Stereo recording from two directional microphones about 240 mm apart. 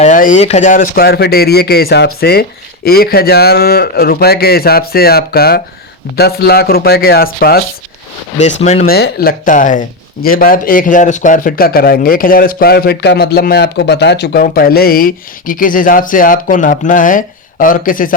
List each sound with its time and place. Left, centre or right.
0.0 s speech: left
8.6 s speech: left
8.9 s speech: left